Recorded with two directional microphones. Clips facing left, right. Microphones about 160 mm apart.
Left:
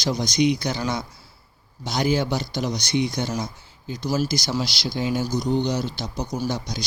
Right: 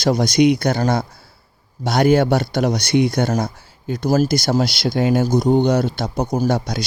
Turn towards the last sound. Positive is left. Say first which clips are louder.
# right 8 dB
turn(degrees=-55)  # may be behind; listen again after turning